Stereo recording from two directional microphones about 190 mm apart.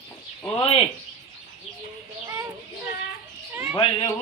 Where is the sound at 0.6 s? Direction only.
30° left (ahead or behind).